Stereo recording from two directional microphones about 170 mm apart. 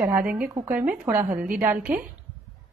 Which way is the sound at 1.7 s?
5° right (ahead or behind).